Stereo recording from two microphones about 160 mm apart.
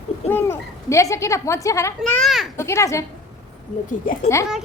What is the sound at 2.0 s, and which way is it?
Speech, centre (ahead or behind).